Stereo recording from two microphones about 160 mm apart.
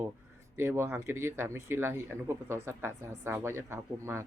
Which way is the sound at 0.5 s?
15° right (ahead or behind).